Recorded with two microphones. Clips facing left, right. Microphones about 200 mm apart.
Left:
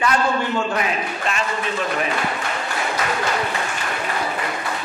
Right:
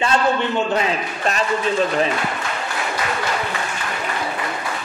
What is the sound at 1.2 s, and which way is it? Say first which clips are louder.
Speech: right 7 dB; 35° right (ahead or behind).